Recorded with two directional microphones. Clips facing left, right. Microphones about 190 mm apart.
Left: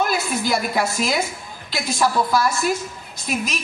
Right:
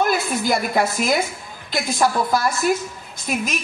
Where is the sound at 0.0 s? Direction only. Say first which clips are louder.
Right 2 dB; 50° right (ahead or behind).